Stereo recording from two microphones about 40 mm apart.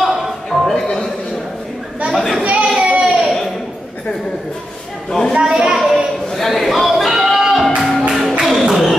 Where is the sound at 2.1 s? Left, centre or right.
Centre.